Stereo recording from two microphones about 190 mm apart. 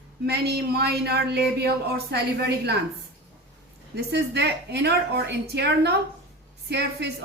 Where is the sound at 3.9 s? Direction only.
60° right (ahead or behind).